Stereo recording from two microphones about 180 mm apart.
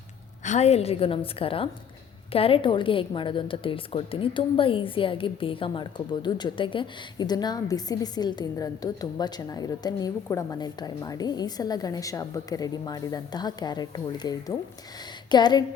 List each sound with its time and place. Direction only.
0.4 s a woman's voice: 40° left (ahead or behind)